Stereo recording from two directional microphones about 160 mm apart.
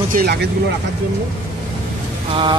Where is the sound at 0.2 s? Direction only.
80° right.